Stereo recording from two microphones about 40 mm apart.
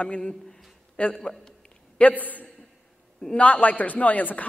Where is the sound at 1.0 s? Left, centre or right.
Left.